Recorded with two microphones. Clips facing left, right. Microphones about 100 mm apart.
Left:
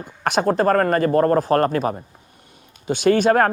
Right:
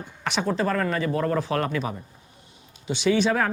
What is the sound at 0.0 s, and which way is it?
Speech, 50° left (ahead or behind).